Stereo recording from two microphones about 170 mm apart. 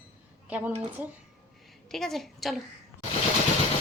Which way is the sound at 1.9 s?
Centre (ahead or behind).